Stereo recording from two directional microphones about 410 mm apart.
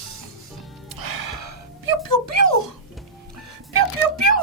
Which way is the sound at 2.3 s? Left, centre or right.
Right.